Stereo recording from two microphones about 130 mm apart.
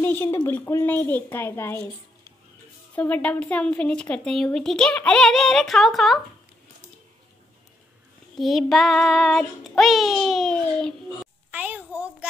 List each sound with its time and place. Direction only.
0.0 s a woman's voice: 15° left (ahead or behind)
2.9 s a woman's voice: 10° left (ahead or behind)
8.4 s a woman's voice: centre (ahead or behind)
11.5 s a child's voice: 15° right (ahead or behind)